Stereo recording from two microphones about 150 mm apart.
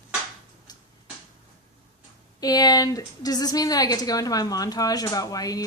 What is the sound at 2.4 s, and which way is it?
A woman's voice, 25° left (ahead or behind).